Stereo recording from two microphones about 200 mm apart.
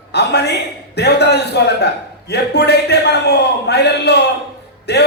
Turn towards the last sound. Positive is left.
turn(degrees=55)  # may be behind; listen again after turning